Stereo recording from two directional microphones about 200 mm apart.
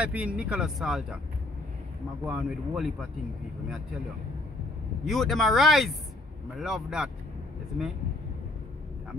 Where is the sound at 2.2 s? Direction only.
5° right (ahead or behind).